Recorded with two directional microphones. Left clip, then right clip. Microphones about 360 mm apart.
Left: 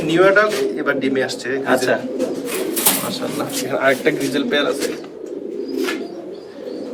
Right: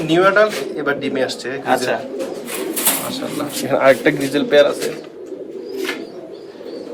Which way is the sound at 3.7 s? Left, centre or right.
Right.